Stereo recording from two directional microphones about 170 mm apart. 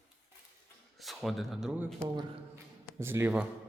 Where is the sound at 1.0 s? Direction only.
Centre (ahead or behind).